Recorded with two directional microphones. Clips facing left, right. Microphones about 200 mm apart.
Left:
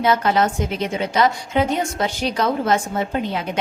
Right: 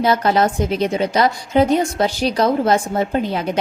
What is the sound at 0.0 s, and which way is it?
Speech, 35° right (ahead or behind).